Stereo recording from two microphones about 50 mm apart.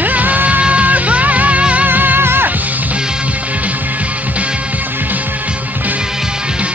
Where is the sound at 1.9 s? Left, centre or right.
Right.